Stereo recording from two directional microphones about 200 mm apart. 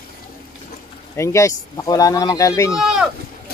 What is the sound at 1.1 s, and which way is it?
Speech, 15° left (ahead or behind).